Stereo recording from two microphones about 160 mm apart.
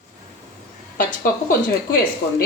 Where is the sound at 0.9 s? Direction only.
65° left (ahead or behind).